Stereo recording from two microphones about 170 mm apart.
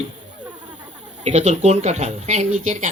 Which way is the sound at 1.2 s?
40° right (ahead or behind).